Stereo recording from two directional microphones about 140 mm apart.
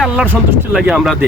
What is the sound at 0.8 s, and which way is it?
Speech, 5° right (ahead or behind).